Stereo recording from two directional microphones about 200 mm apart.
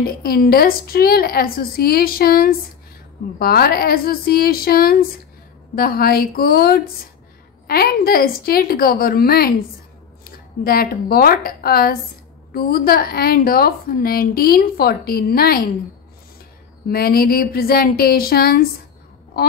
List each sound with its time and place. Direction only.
0.0 s a woman's voice: 50° left (ahead or behind)
10.6 s a woman's voice: 50° left (ahead or behind)
16.9 s a woman's voice: 50° left (ahead or behind)